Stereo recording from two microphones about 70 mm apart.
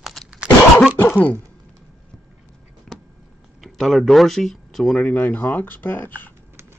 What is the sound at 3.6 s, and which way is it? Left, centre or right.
Speech, centre.